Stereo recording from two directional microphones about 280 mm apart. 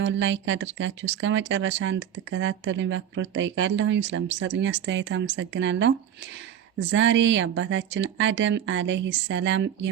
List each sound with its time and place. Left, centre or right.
0.0 s speech: right